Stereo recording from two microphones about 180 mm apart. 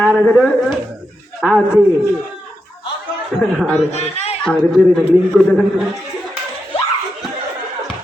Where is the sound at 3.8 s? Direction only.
35° left (ahead or behind).